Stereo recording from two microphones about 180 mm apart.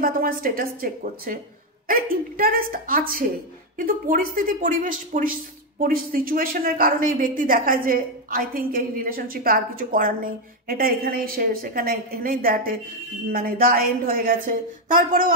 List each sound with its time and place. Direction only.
0.0 s a woman's voice: 55° right (ahead or behind)